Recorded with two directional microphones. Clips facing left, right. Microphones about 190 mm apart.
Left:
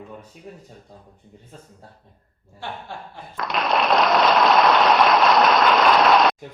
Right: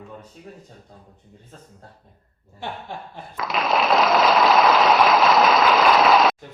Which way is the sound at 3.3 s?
Centre (ahead or behind).